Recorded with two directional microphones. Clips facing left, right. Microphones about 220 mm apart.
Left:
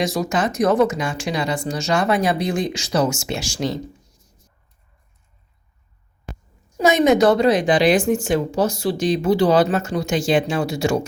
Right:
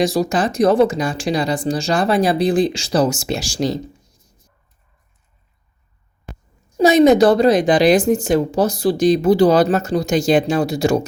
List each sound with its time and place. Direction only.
0.0 s a woman's voice: 35° right (ahead or behind)
6.7 s a woman's voice: 35° right (ahead or behind)